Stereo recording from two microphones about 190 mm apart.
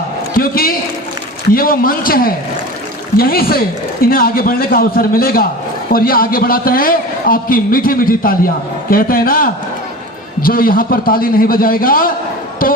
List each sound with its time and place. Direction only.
0.3 s a man's voice: 50° left (ahead or behind)